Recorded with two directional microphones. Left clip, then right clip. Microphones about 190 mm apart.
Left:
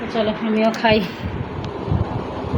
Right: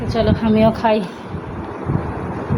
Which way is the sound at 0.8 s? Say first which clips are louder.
Even; 5° left (ahead or behind).